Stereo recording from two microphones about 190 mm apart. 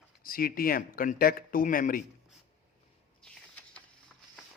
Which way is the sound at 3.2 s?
5° left (ahead or behind).